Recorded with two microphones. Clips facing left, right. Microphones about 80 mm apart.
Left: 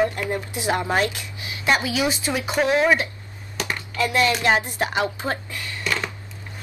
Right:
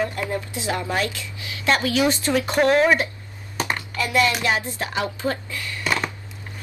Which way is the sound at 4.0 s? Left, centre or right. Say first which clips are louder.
Left 1 dB; left.